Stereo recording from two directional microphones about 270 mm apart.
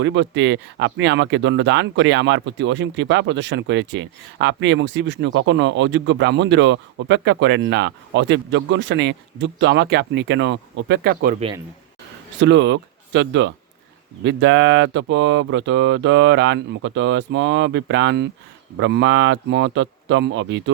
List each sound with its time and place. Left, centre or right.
0.0 s speech: right